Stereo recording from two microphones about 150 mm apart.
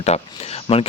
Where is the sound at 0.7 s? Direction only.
30° left (ahead or behind).